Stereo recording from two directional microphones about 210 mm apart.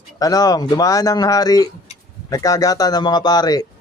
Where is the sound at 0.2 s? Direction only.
15° left (ahead or behind).